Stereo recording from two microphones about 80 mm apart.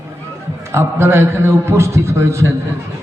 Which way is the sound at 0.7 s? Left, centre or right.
Right.